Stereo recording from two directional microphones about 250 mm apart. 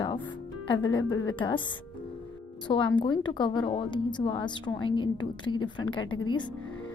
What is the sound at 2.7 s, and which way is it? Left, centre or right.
Speech, centre.